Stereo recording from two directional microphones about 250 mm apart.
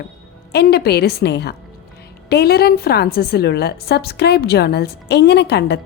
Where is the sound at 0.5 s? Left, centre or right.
Left.